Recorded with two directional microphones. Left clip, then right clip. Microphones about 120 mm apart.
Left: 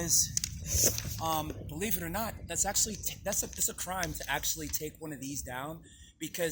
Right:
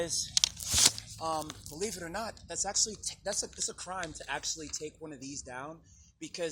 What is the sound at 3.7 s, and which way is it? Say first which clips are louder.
Speech: left 3 dB; 35° left (ahead or behind).